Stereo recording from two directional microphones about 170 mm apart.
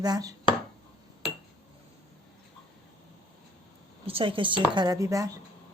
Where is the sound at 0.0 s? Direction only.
20° right (ahead or behind).